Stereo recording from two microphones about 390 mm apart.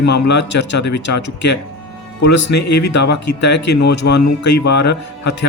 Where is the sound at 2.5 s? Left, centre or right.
Left.